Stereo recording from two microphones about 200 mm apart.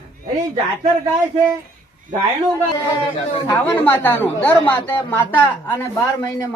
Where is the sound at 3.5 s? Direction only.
10° left (ahead or behind).